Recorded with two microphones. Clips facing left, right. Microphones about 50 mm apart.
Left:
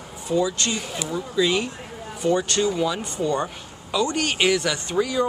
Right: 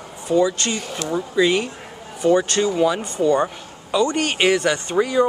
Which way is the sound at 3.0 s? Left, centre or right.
Centre.